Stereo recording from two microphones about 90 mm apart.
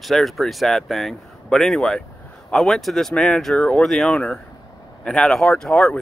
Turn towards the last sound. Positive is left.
turn(degrees=10)  # may be behind; listen again after turning